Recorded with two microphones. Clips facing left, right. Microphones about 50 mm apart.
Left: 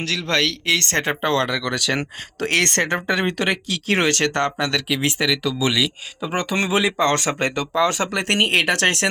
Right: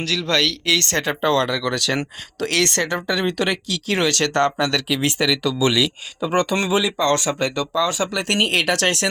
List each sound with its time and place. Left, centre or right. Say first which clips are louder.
0.0 s speech: right 1 dB; left
0.9 s speech: right 2 dB; left
1.5 s speech: right 1 dB; centre
3.1 s speech: even; left
3.3 s speech: even; left
4.4 s speech: right 2 dB; centre
6.7 s speech: even; left